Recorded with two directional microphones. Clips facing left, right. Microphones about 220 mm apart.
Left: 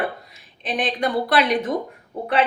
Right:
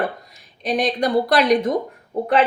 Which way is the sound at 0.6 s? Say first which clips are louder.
Right 3 dB; 40° right (ahead or behind).